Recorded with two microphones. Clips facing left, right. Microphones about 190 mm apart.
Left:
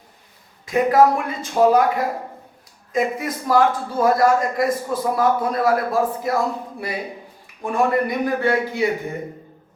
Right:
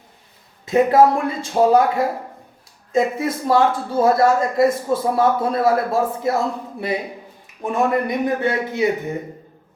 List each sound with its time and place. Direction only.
0.6 s a man's voice: 25° right (ahead or behind)
2.9 s a man's voice: 25° right (ahead or behind)